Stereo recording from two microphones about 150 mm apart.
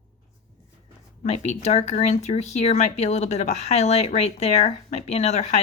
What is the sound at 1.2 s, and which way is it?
Speech, 45° left (ahead or behind).